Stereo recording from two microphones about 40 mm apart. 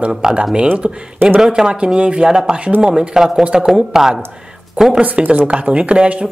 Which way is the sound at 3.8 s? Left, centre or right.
Centre.